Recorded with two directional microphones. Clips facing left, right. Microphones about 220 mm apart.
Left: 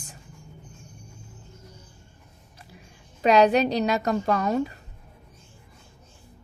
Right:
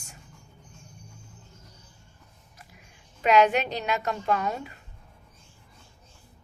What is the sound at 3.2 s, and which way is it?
A woman's voice, 35° left (ahead or behind).